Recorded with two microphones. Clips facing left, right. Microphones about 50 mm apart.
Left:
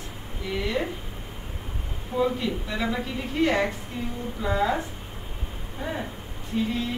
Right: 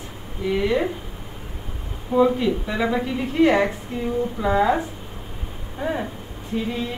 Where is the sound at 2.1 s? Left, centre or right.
Centre.